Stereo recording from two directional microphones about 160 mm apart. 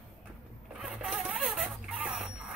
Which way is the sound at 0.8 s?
5° right (ahead or behind).